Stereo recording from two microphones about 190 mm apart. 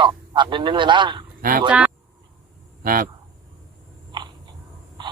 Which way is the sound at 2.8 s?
50° right (ahead or behind).